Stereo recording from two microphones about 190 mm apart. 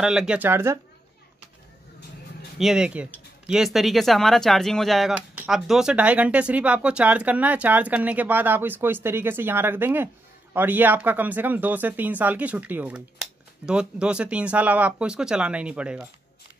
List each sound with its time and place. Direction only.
0.0 s speech: 5° right (ahead or behind)
2.6 s speech: 5° right (ahead or behind)